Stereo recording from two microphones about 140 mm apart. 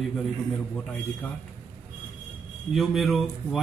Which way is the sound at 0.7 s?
10° left (ahead or behind).